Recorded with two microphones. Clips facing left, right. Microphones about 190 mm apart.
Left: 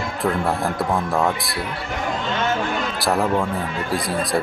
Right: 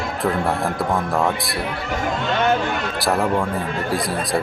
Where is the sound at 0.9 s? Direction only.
Centre (ahead or behind).